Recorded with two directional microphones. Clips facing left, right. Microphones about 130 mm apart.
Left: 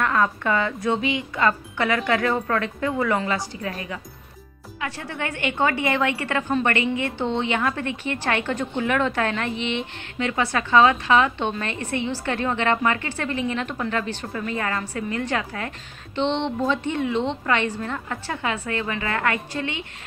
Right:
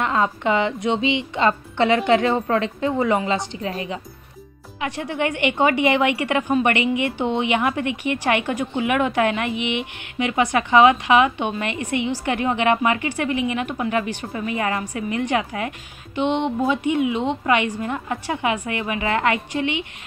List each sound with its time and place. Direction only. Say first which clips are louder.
0.0 s a woman's voice: right 1 dB; 20° right (ahead or behind)